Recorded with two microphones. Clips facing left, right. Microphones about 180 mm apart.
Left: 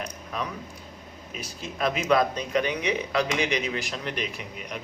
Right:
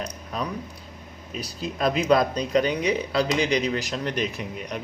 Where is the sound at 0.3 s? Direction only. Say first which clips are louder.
Right 3 dB; 35° right (ahead or behind).